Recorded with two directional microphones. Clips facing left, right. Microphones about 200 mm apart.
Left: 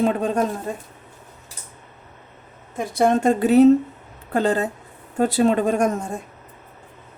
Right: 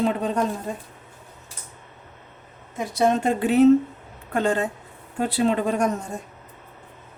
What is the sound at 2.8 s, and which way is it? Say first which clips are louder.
Speech: left 3 dB; 50° left (ahead or behind).